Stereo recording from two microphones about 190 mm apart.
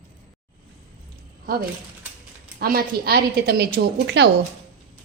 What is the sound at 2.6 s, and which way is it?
A woman's voice, 55° right (ahead or behind).